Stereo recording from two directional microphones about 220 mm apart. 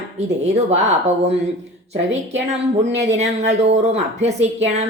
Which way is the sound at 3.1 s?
30° right (ahead or behind).